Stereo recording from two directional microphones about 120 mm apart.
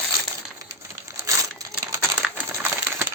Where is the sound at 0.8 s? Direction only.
25° right (ahead or behind).